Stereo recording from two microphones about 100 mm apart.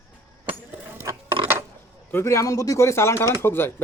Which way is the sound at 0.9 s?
25° right (ahead or behind).